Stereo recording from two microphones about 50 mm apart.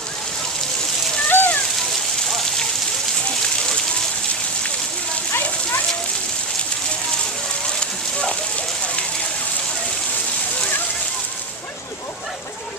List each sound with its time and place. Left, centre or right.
1.3 s rain: left